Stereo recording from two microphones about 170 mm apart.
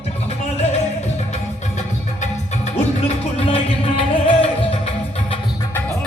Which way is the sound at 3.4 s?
35° left (ahead or behind).